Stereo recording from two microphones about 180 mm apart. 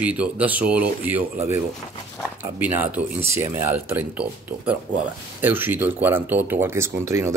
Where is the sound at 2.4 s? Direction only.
10° right (ahead or behind).